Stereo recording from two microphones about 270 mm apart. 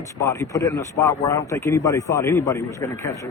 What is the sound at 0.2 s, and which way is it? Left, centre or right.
A man's voice, centre.